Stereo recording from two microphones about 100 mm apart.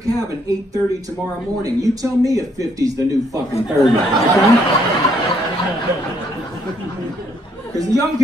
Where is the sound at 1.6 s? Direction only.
35° right (ahead or behind).